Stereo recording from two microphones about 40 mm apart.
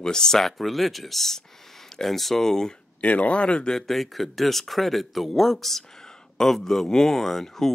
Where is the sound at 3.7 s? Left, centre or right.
Centre.